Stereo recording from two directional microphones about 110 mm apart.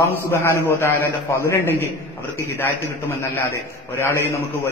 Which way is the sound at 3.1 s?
25° left (ahead or behind).